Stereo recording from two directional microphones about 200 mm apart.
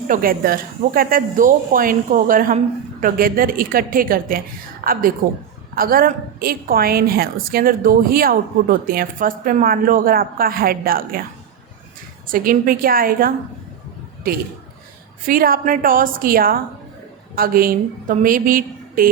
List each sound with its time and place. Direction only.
0.1 s a woman's voice: 45° right (ahead or behind)
12.3 s a woman's voice: 45° right (ahead or behind)